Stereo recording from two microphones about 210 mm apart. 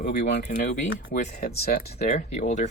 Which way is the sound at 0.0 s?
35° left (ahead or behind).